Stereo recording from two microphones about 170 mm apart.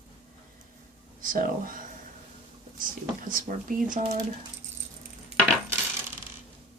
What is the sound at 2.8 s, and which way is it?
Speech, 55° right (ahead or behind).